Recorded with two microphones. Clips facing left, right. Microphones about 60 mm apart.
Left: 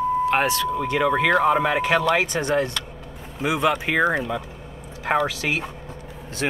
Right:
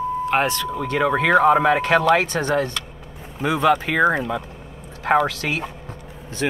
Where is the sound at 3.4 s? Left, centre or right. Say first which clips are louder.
Right 3 dB; centre.